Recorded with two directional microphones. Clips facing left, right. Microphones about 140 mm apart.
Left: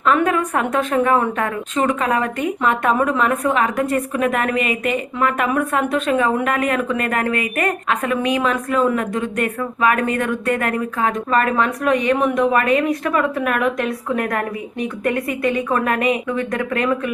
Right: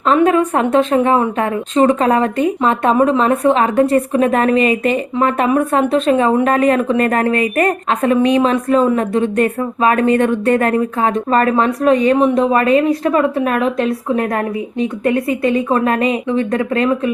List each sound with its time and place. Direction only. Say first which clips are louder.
0.0 s a woman's voice: right 5 dB; 25° right (ahead or behind)